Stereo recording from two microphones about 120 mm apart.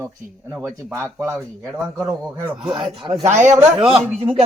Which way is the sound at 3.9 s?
55° right (ahead or behind).